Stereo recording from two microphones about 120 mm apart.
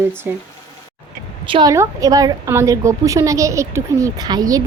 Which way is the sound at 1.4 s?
45° right (ahead or behind).